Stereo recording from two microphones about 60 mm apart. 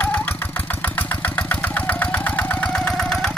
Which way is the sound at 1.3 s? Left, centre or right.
Left.